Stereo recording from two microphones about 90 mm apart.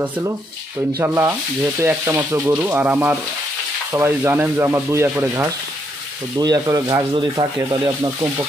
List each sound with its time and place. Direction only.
1.0 s speech: 25° right (ahead or behind)
6.3 s speech: 45° right (ahead or behind)